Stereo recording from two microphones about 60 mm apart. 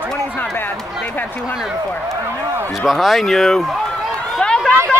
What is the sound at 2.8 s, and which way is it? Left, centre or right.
Speech, centre.